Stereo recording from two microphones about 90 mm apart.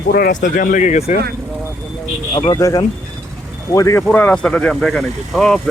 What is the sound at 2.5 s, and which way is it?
Speech, 35° left (ahead or behind).